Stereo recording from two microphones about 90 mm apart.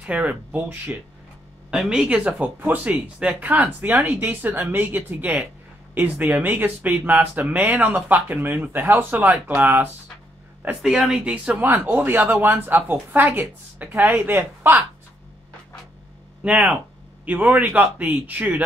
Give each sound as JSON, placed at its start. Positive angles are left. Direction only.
{"t": 0.0, "sound": "a man's voice", "side_deg": -15}
{"t": 10.8, "sound": "speech", "side_deg": -5}
{"t": 11.2, "sound": "speech", "side_deg": -20}
{"t": 16.4, "sound": "a man's voice", "side_deg": -15}